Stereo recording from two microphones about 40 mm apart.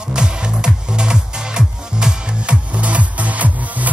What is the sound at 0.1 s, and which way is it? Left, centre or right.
Music, right.